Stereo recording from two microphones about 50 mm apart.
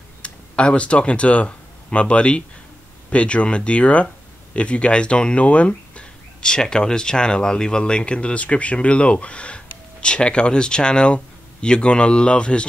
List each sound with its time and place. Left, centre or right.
0.2 s speech: left